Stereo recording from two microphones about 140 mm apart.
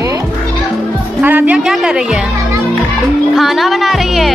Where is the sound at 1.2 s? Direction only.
10° right (ahead or behind).